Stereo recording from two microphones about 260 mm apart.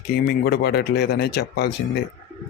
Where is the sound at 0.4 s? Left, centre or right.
Left.